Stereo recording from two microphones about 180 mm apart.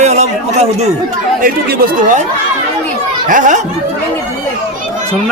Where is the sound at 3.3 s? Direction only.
45° right (ahead or behind).